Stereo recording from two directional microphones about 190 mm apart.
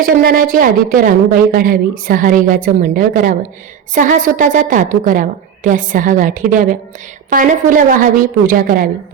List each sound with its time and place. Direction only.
0.0 s a woman's voice: 50° right (ahead or behind)